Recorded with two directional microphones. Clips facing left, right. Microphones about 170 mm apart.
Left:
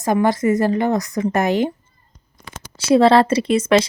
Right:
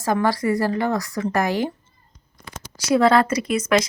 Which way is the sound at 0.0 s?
20° left (ahead or behind).